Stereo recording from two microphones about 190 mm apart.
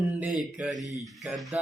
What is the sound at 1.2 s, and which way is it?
Speech, centre (ahead or behind).